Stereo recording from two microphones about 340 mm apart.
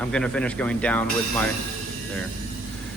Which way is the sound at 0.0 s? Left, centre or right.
Centre.